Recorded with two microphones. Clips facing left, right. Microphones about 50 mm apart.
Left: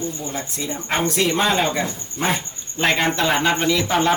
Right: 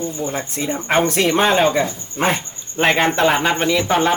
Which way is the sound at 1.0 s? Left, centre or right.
Right.